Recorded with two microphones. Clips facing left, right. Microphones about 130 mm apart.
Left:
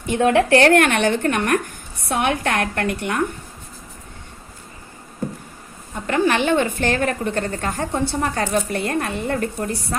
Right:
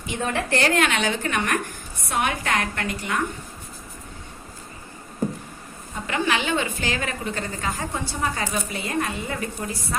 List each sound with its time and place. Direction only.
0.1 s a woman's voice: 60° left (ahead or behind)
6.1 s a woman's voice: 50° left (ahead or behind)